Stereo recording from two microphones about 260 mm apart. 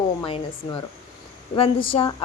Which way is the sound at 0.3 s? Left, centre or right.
Left.